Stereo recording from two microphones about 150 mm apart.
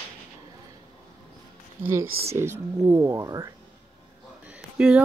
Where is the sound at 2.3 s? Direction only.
20° right (ahead or behind).